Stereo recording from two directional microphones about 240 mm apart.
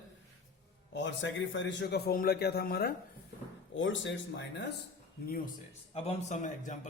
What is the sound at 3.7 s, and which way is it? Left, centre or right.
Speech, left.